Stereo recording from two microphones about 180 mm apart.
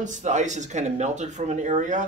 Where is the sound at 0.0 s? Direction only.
40° right (ahead or behind).